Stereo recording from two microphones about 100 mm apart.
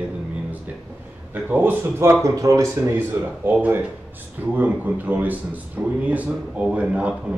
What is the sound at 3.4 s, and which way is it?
A man's voice, 20° right (ahead or behind).